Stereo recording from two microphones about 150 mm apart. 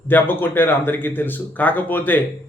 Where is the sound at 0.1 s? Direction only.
15° left (ahead or behind).